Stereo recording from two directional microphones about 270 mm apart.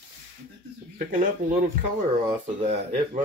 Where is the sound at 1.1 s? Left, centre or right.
Right.